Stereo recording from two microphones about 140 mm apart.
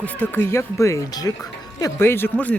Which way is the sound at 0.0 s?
10° left (ahead or behind).